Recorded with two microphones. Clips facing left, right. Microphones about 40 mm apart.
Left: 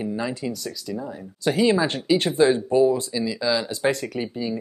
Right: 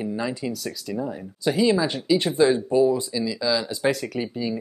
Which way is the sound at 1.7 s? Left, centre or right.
Centre.